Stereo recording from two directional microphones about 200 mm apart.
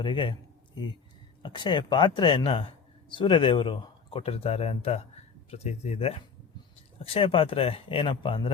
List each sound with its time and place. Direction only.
0.0 s a man's voice: 25° left (ahead or behind)
1.4 s a man's voice: 20° left (ahead or behind)